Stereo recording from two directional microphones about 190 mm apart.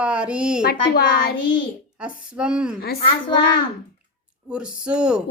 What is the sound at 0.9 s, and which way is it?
Speech, 55° left (ahead or behind).